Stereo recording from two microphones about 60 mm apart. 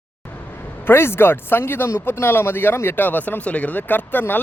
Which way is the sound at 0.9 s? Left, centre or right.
Left.